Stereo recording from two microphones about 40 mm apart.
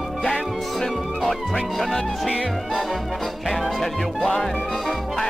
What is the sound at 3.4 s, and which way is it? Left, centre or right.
Speech, centre.